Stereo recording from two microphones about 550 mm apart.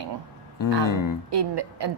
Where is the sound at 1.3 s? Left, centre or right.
Right.